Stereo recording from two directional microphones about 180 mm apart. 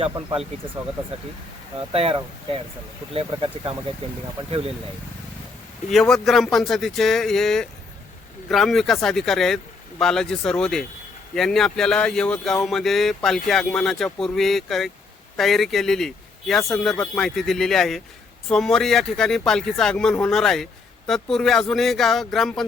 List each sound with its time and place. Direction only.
1.9 s speech: 30° right (ahead or behind)
5.9 s speech: centre (ahead or behind)